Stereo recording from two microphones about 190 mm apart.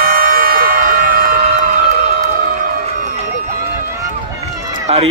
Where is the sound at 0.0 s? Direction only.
50° right (ahead or behind).